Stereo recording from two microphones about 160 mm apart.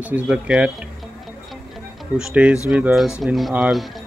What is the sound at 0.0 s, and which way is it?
Speech, 10° right (ahead or behind).